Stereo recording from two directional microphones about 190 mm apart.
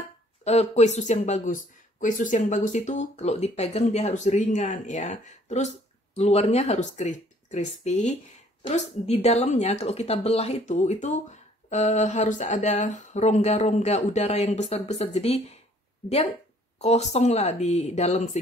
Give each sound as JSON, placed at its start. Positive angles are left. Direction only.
{"t": 0.4, "sound": "speech", "side_deg": 35}
{"t": 16.7, "sound": "speech", "side_deg": 35}